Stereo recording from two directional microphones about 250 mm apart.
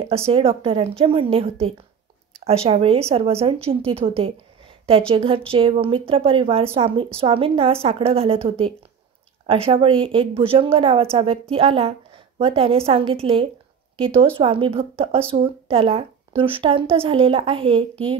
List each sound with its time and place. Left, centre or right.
0.1 s speech: right